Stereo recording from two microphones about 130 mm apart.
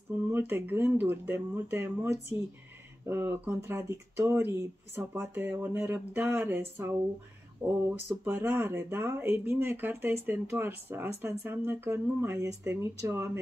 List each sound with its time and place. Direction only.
0.3 s speech: 15° right (ahead or behind)
3.1 s speech: 15° right (ahead or behind)